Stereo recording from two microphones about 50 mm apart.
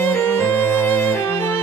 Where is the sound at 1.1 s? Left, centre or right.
Left.